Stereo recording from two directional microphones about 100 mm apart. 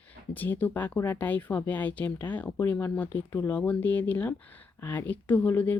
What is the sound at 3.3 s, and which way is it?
Speech, 30° left (ahead or behind).